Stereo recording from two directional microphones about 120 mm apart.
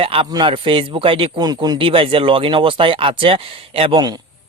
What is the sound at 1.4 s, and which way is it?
Speech, 35° right (ahead or behind).